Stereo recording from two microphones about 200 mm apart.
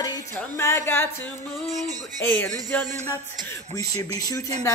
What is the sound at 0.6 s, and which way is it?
Speech, 10° left (ahead or behind).